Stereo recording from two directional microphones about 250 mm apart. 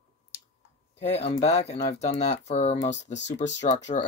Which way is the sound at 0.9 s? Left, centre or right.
Left.